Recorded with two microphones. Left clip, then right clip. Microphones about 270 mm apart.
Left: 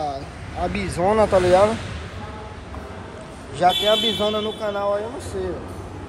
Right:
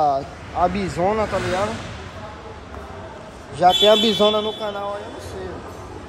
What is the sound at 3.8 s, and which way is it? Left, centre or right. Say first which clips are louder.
Speech: right 4 dB; right.